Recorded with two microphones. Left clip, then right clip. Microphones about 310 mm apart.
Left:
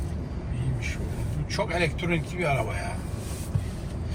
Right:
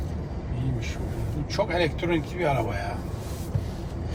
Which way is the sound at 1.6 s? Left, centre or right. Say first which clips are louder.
Right 3 dB; centre.